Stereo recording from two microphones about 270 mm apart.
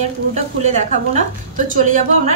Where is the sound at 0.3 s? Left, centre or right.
Right.